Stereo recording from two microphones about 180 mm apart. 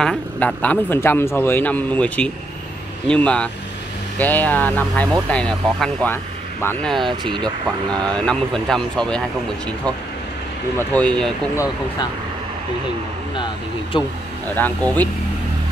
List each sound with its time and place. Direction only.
0.0 s a man's voice: 5° left (ahead or behind)
7.1 s speech: 25° right (ahead or behind)
8.1 s speech: 5° left (ahead or behind)
10.8 s a man's voice: 5° left (ahead or behind)
11.5 s speech: 20° left (ahead or behind)
13.9 s speech: 25° left (ahead or behind)
14.5 s a man's voice: 10° left (ahead or behind)